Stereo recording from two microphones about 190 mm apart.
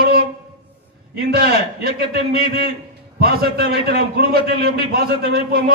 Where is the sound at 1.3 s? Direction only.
55° right (ahead or behind).